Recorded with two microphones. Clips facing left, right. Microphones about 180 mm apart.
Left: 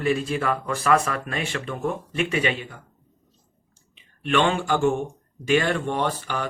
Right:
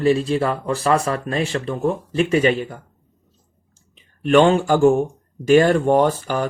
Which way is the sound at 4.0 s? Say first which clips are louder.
Right 8 dB; 40° right (ahead or behind).